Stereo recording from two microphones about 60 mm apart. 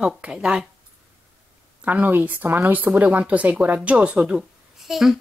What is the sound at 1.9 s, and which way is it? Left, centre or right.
Speech, right.